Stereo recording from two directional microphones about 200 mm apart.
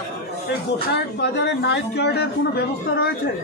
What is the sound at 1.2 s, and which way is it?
Speech, 60° left (ahead or behind).